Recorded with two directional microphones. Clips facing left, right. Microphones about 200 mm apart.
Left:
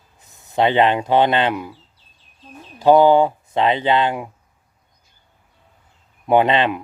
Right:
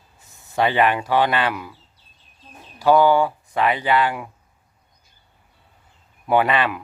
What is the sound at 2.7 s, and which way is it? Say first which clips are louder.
Speech: left 4 dB; 20° left (ahead or behind).